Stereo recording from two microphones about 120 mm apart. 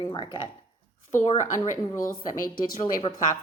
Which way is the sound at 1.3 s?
85° left.